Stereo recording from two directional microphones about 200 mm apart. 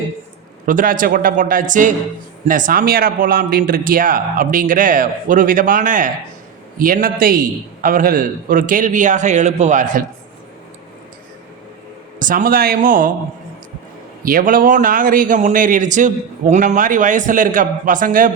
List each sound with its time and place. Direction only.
0.6 s a man's voice: 40° right (ahead or behind)
12.2 s a man's voice: 45° right (ahead or behind)
14.2 s a man's voice: 45° right (ahead or behind)